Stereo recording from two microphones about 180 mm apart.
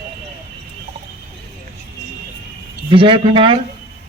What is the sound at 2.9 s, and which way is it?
Speech, 30° right (ahead or behind).